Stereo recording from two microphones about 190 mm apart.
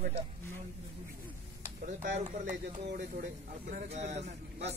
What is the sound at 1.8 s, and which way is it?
Speech, 40° right (ahead or behind).